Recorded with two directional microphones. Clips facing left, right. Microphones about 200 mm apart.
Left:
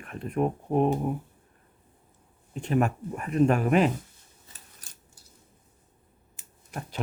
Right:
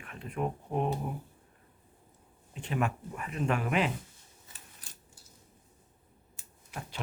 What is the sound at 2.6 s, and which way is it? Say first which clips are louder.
Speech: left 7 dB; 45° left (ahead or behind).